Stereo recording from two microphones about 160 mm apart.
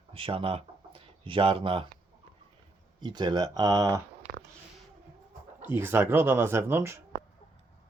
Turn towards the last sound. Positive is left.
turn(degrees=-15)  # may be behind; listen again after turning